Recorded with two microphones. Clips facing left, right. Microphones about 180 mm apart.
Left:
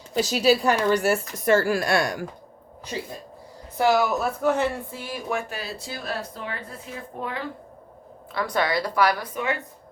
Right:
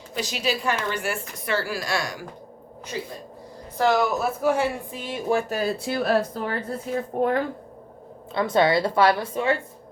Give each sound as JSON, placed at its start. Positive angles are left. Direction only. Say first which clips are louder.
{"t": 0.1, "sound": "a woman's voice", "louder": "left 7 dB", "side_deg": 35}
{"t": 2.9, "sound": "speech", "louder": "even", "side_deg": 25}
{"t": 3.8, "sound": "speech", "louder": "even", "side_deg": 5}
{"t": 5.3, "sound": "speech", "louder": "right 6 dB", "side_deg": -35}
{"t": 5.8, "sound": "speech", "louder": "right 9 dB", "side_deg": -60}
{"t": 6.3, "sound": "a woman's voice", "louder": "right 7 dB", "side_deg": -40}
{"t": 8.3, "sound": "a woman's voice", "louder": "right 5 dB", "side_deg": -25}